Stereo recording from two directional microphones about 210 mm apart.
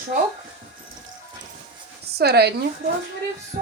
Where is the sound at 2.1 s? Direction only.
50° right (ahead or behind).